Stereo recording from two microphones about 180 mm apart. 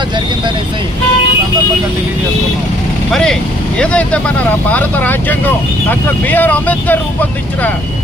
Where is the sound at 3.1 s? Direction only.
5° left (ahead or behind).